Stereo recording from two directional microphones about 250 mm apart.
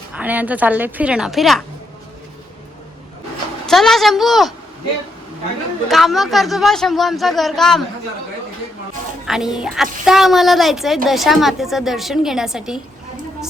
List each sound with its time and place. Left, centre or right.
0.1 s a woman's voice: centre
3.7 s a woman's voice: centre
5.9 s a woman's voice: centre
9.2 s a woman's voice: centre